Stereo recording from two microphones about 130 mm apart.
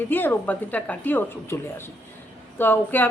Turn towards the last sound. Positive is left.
turn(degrees=15)  # may be behind; listen again after turning